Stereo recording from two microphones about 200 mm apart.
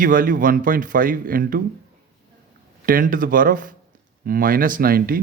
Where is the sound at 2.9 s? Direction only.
45° right (ahead or behind).